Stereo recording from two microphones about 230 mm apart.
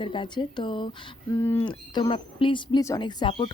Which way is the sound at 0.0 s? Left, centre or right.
Left.